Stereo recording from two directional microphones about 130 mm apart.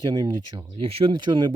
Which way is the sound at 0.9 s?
45° right (ahead or behind).